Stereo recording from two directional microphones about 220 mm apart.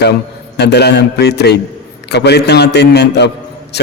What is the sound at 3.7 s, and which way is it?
Mantra, 50° left (ahead or behind).